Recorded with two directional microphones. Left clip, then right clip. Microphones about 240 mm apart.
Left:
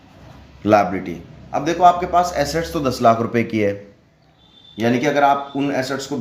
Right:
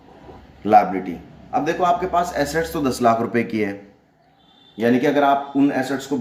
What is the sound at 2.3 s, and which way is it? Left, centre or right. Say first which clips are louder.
Speech: left 1 dB; left.